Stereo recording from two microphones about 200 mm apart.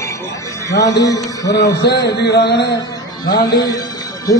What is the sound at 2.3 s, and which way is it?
Speech, 55° left (ahead or behind).